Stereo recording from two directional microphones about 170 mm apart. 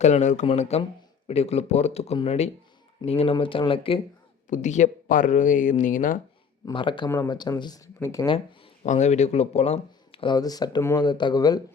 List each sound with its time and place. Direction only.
0.0 s speech: 45° left (ahead or behind)
4.4 s speech: 45° left (ahead or behind)
6.7 s speech: 30° left (ahead or behind)
8.8 s speech: 45° left (ahead or behind); by 11.6 s 25° left (ahead or behind)